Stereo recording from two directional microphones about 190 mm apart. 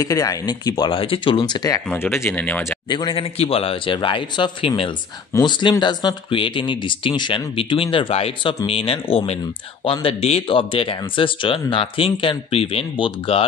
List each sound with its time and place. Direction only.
0.0 s speech: 20° left (ahead or behind)
2.9 s speech: 25° left (ahead or behind)